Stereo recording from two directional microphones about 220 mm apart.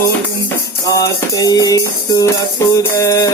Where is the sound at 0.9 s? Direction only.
15° left (ahead or behind).